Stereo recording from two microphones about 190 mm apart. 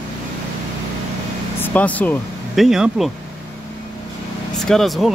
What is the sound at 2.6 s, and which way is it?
Speech, 5° right (ahead or behind).